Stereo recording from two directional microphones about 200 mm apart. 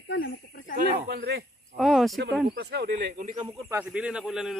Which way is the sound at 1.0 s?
55° right (ahead or behind).